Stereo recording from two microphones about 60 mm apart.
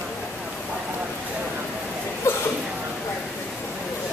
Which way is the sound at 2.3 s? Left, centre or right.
Left.